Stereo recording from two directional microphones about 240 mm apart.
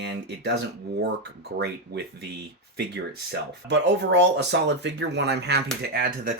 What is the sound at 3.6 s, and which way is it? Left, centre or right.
Speech, right.